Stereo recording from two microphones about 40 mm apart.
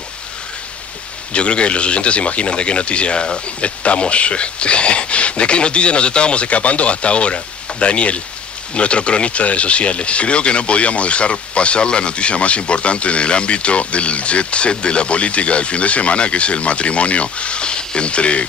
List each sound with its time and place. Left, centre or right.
1.3 s speech: left